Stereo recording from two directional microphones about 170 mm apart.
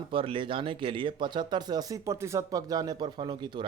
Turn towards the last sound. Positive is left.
turn(degrees=-30)  # may be behind; listen again after turning